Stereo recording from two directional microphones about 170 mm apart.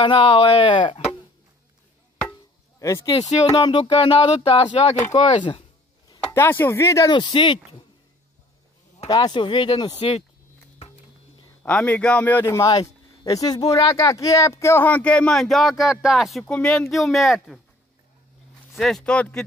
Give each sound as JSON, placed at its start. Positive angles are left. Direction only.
{"t": 0.0, "sound": "speech", "side_deg": 30}
{"t": 2.8, "sound": "speech", "side_deg": 20}
{"t": 3.3, "sound": "speech", "side_deg": 35}
{"t": 6.2, "sound": "speech", "side_deg": 10}
{"t": 9.0, "sound": "speech", "side_deg": 25}
{"t": 11.6, "sound": "speech", "side_deg": 10}
{"t": 18.7, "sound": "speech", "side_deg": 0}